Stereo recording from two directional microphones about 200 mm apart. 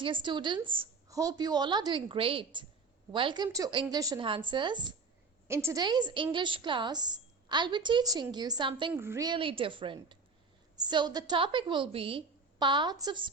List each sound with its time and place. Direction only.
0.0 s a woman's voice: 25° right (ahead or behind)
8.9 s a woman's voice: 10° right (ahead or behind)